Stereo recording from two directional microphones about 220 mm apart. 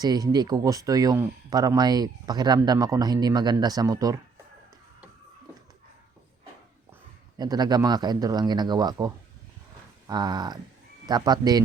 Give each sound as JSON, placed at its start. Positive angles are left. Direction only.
{"t": 0.0, "sound": "speech", "side_deg": -20}
{"t": 7.3, "sound": "a man's voice", "side_deg": -20}